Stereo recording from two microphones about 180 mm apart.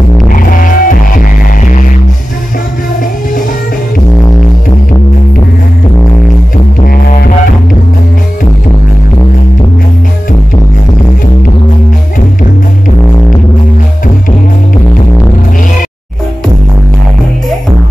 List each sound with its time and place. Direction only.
0.3 s music: 50° left (ahead or behind)
6.9 s music: 55° left (ahead or behind)